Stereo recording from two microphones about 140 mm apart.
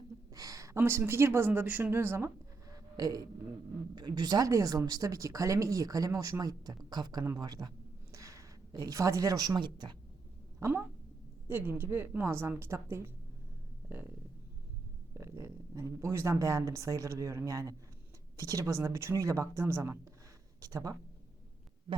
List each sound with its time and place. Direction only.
0.3 s speech: 25° right (ahead or behind)
2.7 s a sound: 25° right (ahead or behind)
3.9 s speech: 30° right (ahead or behind)
8.1 s a sound: 25° right (ahead or behind)
8.7 s speech: 25° right (ahead or behind)
10.6 s a woman's voice: 15° right (ahead or behind)
15.1 s speech: 20° right (ahead or behind)